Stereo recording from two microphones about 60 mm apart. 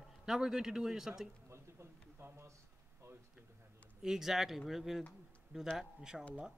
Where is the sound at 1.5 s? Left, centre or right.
Right.